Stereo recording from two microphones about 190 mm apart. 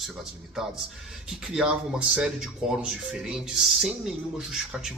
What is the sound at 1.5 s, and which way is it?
Speech, 5° right (ahead or behind).